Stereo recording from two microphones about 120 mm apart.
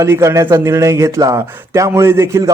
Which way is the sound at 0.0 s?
25° right (ahead or behind).